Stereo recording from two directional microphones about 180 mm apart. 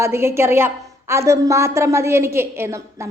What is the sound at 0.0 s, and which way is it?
A woman's voice, 15° right (ahead or behind).